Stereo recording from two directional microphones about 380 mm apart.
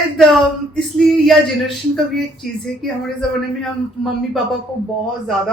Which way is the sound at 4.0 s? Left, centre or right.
Centre.